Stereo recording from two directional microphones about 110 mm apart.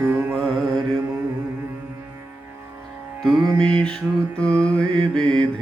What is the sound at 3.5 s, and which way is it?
Mantra, 10° left (ahead or behind).